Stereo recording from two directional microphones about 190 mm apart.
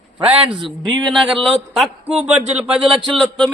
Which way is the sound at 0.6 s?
Centre (ahead or behind).